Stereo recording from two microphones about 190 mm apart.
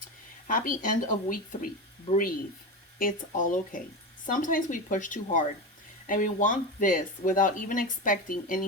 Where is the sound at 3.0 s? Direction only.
45° left (ahead or behind).